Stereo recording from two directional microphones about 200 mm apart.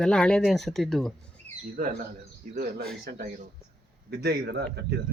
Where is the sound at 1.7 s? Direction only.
45° right (ahead or behind).